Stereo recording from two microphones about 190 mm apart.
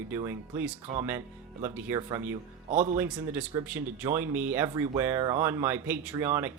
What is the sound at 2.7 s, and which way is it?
Speech, 40° right (ahead or behind).